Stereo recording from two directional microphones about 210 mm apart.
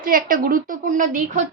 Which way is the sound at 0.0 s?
40° right (ahead or behind).